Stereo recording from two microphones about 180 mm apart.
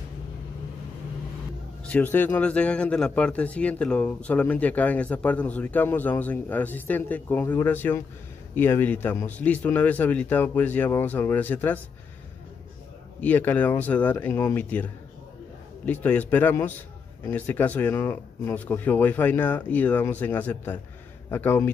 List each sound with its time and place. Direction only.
1.9 s speech: 10° left (ahead or behind)
13.2 s speech: 10° left (ahead or behind)